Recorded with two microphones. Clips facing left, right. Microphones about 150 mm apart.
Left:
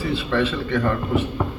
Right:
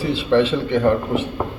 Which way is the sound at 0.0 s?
25° right (ahead or behind).